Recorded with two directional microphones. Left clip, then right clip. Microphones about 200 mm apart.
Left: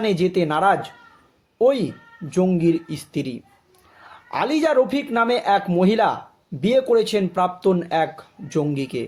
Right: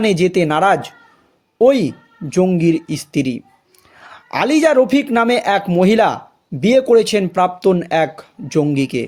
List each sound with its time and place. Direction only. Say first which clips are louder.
0.0 s speech: right 5 dB; 40° right (ahead or behind)